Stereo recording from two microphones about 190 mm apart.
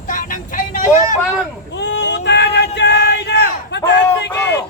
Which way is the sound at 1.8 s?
65° left (ahead or behind).